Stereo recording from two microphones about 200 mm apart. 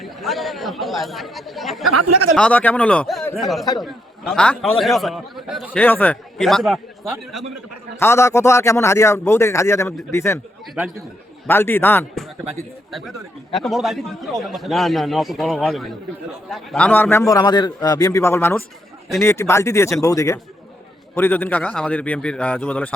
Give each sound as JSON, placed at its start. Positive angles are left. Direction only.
{"t": 0.0, "sound": "a man's voice", "side_deg": 0}
{"t": 7.9, "sound": "a man's voice", "side_deg": 10}
{"t": 10.8, "sound": "speech", "side_deg": -10}
{"t": 11.4, "sound": "a man's voice", "side_deg": 10}